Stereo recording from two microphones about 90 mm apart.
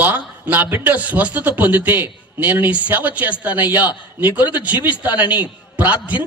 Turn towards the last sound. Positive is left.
turn(degrees=-15)  # may be behind; listen again after turning